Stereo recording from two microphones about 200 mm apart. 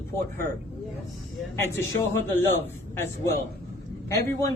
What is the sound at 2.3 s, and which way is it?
Speech, 10° left (ahead or behind).